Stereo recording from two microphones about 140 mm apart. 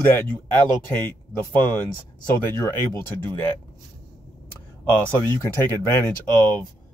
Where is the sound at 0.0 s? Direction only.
15° left (ahead or behind).